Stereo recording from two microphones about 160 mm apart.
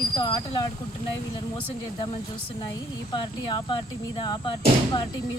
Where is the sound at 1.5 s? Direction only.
35° left (ahead or behind).